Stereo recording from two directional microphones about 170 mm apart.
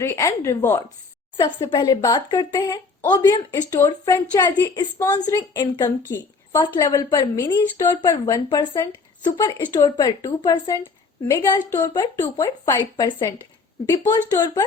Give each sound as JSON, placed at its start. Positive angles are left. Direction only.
{"t": 0.0, "sound": "a woman's voice", "side_deg": 15}
{"t": 1.4, "sound": "a woman's voice", "side_deg": 25}